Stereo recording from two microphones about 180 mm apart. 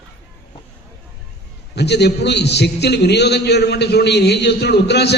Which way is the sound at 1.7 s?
70° left (ahead or behind).